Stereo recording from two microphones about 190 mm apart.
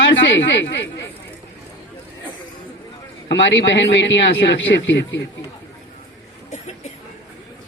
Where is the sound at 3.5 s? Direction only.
70° left (ahead or behind).